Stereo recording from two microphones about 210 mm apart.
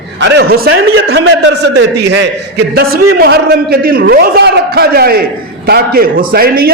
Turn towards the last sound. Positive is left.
turn(degrees=-45)  # may be behind; listen again after turning